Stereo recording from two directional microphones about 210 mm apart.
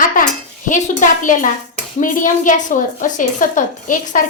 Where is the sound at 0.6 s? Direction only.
40° left (ahead or behind).